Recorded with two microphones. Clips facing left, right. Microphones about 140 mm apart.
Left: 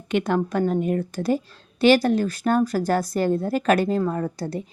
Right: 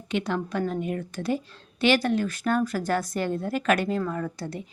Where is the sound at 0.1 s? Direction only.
50° left (ahead or behind).